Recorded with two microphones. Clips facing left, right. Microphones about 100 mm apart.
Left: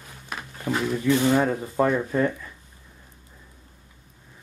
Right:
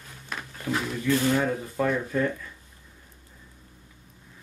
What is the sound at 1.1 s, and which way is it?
Speech, 20° left (ahead or behind).